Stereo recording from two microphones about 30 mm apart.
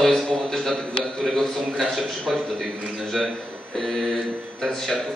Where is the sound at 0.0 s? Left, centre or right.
Centre.